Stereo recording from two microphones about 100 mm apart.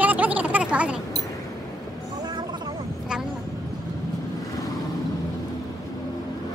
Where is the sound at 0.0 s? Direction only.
15° right (ahead or behind).